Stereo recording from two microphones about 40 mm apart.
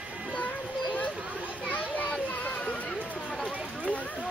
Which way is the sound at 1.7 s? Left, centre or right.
Left.